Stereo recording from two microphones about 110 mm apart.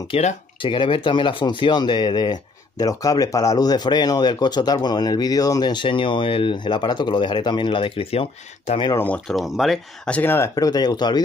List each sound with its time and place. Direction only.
0.1 s speech: 60° left (ahead or behind)
8.9 s speech: 15° left (ahead or behind)
9.3 s speech: centre (ahead or behind)
10.0 s speech: 15° left (ahead or behind)
10.5 s speech: 35° left (ahead or behind)